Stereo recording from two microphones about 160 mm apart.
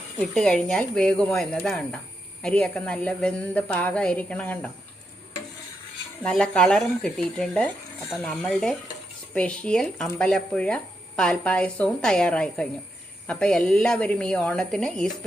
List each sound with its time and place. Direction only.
0.2 s a woman's voice: 5° left (ahead or behind)
6.2 s a woman's voice: 5° left (ahead or behind)